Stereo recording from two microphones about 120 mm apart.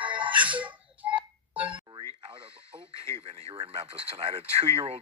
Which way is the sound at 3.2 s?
55° right (ahead or behind).